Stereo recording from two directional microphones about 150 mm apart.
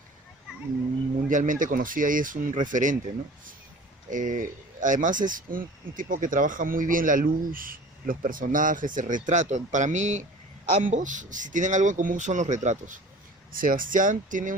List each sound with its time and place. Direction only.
1.3 s speech: 60° right (ahead or behind)
4.1 s speech: 60° right (ahead or behind)
13.5 s speech: 70° right (ahead or behind)